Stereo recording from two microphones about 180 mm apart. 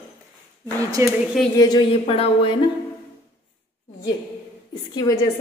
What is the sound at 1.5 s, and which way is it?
Speech, 20° left (ahead or behind).